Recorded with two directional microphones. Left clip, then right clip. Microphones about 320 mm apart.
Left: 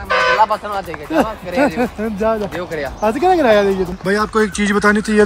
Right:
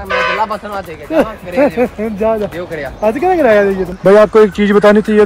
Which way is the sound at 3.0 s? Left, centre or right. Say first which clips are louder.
Right 3 dB; centre.